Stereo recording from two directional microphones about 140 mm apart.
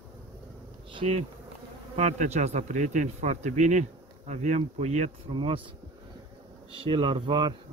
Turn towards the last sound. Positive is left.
turn(degrees=-35)  # may be behind; listen again after turning